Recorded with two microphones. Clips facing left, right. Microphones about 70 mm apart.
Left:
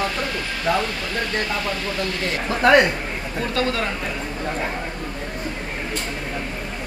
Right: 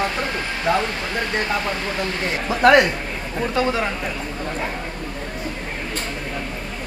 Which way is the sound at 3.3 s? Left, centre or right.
Centre.